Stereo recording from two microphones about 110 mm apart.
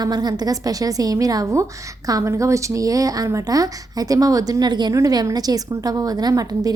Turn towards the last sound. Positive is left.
turn(degrees=-35)  # may be behind; listen again after turning